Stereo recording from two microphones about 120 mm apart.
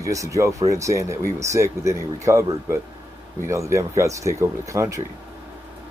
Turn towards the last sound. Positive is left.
turn(degrees=-25)  # may be behind; listen again after turning